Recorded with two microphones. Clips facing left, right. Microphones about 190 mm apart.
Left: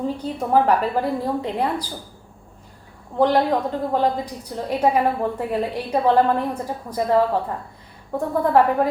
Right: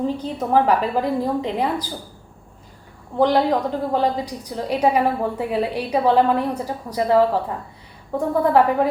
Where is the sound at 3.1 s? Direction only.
Centre (ahead or behind).